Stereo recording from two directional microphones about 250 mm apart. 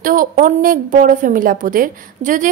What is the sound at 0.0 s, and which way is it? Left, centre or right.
A woman's voice, right.